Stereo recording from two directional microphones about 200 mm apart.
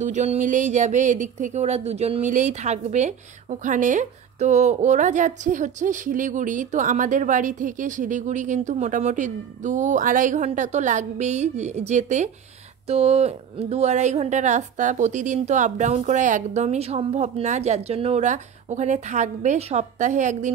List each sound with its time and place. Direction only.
0.0 s speech: 35° right (ahead or behind)